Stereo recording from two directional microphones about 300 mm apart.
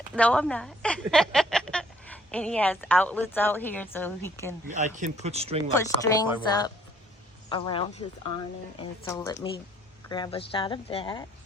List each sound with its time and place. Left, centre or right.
0.1 s a woman's voice: centre
4.7 s speech: right
5.7 s speech: centre
7.5 s speech: centre